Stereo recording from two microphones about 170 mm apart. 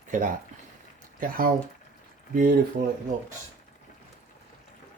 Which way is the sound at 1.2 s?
55° right (ahead or behind).